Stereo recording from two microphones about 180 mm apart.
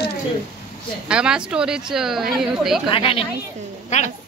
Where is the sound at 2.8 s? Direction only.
30° left (ahead or behind).